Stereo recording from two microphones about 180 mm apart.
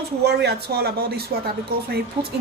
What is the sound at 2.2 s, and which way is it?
Speech, 30° right (ahead or behind).